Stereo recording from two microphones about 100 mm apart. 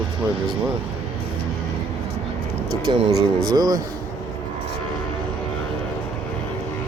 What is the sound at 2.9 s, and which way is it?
Speech, 40° right (ahead or behind).